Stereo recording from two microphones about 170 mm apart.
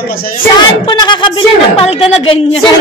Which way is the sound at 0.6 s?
25° left (ahead or behind).